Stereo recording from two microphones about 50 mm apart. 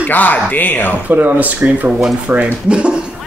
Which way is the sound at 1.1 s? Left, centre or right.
Right.